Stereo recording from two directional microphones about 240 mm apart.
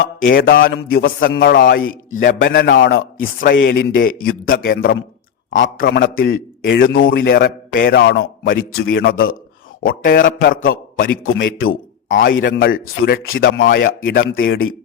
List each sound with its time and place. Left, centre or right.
0.2 s a man's voice: left
4.2 s a man's voice: left
7.1 s a man's voice: left
11.3 s a man's voice: left
12.0 s speech: left